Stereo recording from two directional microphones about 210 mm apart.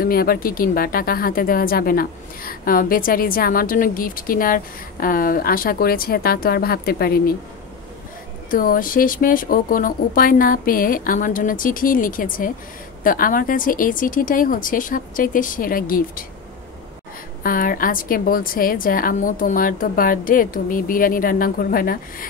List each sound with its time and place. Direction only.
0.0 s a woman's voice: 45° left (ahead or behind)
8.5 s speech: 40° left (ahead or behind)
17.4 s a woman's voice: 40° left (ahead or behind)